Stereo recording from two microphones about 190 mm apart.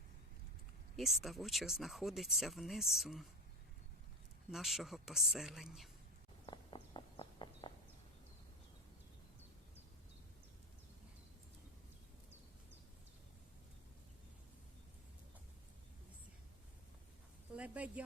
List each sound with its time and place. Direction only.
0.9 s speech: centre (ahead or behind)
4.5 s speech: centre (ahead or behind)
6.4 s walk: 25° left (ahead or behind)
17.5 s a sound: 5° right (ahead or behind)